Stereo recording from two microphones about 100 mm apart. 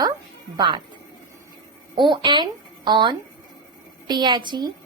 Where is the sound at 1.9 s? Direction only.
50° right (ahead or behind).